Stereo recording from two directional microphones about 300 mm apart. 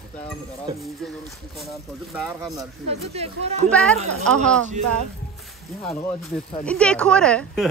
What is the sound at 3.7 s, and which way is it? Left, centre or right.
Speech, centre.